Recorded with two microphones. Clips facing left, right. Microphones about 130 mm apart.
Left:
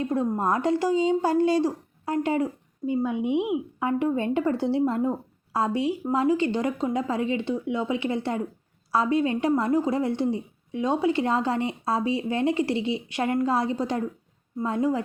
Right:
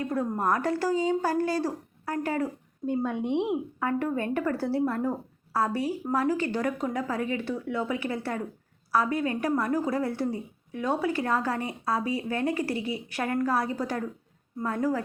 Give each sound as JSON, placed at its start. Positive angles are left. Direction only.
{"t": 0.0, "sound": "a woman's voice", "side_deg": 20}
{"t": 2.8, "sound": "a woman's voice", "side_deg": 5}